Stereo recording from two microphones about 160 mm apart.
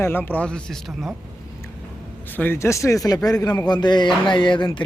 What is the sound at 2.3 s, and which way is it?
A man's voice, 10° left (ahead or behind).